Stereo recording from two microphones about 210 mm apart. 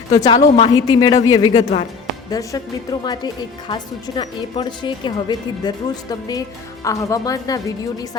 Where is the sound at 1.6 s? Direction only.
35° left (ahead or behind).